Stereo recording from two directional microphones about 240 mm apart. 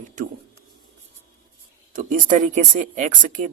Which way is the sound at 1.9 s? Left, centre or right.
Right.